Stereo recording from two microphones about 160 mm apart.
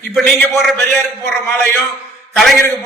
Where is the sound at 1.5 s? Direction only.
15° left (ahead or behind).